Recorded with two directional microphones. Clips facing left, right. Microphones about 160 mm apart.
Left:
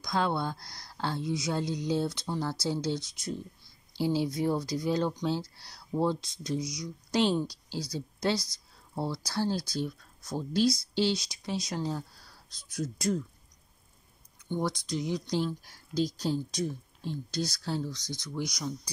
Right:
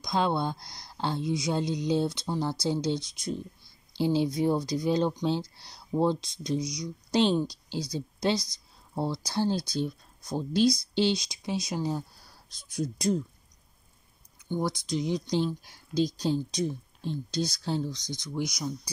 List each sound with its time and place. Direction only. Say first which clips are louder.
0.0 s speech: right 2 dB; 20° right (ahead or behind)
14.9 s speech: right 3 dB; 20° right (ahead or behind)